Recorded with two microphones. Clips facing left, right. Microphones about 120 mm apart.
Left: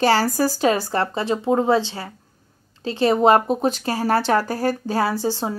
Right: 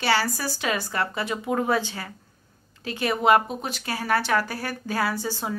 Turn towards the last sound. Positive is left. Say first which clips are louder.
# left 5 dB
turn(degrees=35)  # may be behind; listen again after turning